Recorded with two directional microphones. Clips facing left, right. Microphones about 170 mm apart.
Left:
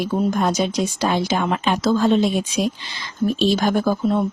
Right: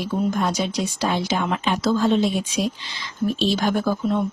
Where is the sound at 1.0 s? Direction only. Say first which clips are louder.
Left 2 dB; 50° left (ahead or behind).